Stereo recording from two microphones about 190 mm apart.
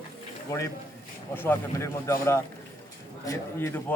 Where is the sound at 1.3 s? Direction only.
10° left (ahead or behind).